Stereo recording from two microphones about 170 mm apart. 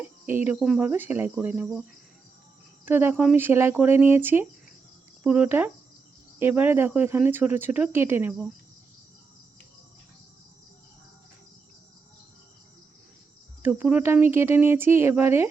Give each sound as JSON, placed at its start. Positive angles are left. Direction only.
{"t": 0.0, "sound": "cricket", "side_deg": -10}
{"t": 0.6, "sound": "speech", "side_deg": -5}
{"t": 2.8, "sound": "speech", "side_deg": -10}
{"t": 13.6, "sound": "speech", "side_deg": -10}